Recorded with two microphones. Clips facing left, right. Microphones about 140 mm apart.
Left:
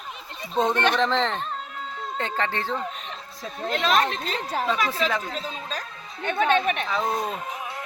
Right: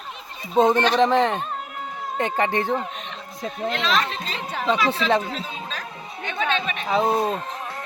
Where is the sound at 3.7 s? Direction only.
45° left (ahead or behind).